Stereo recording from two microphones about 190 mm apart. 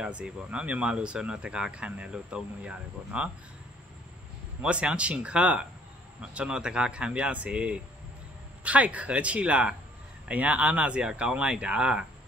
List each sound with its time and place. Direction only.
0.0 s speech: 5° right (ahead or behind)
4.6 s speech: 5° right (ahead or behind)